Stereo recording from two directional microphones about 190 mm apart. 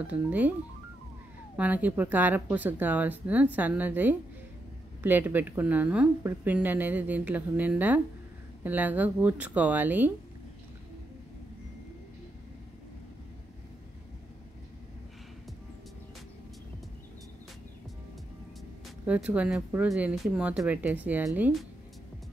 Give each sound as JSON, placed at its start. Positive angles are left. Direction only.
{"t": 0.0, "sound": "a woman's voice", "side_deg": -5}
{"t": 1.6, "sound": "a woman's voice", "side_deg": -10}
{"t": 19.0, "sound": "a woman's voice", "side_deg": -5}